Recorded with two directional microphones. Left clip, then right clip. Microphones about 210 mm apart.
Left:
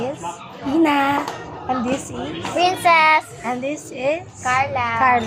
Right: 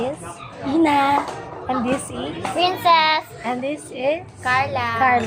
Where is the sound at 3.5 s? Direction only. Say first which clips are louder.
Even; centre (ahead or behind).